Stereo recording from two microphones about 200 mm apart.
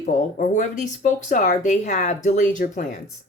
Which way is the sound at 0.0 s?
40° left (ahead or behind).